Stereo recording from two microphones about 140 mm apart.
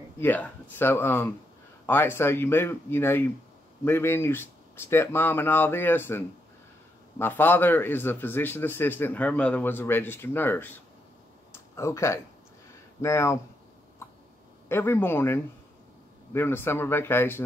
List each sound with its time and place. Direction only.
0.2 s speech: 15° left (ahead or behind)
11.5 s a sound: 20° left (ahead or behind)
13.0 s speech: 20° left (ahead or behind)
14.7 s speech: 15° left (ahead or behind)